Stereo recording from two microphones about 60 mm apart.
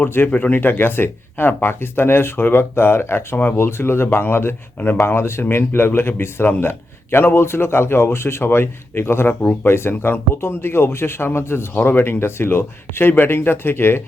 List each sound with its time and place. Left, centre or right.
0.0 s speech: left
0.3 s speech: left